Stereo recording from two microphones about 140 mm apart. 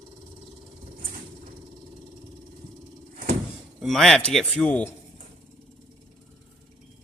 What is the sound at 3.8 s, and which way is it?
A man's voice, centre (ahead or behind).